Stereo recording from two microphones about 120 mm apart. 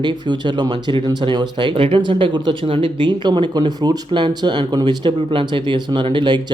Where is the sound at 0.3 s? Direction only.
40° right (ahead or behind).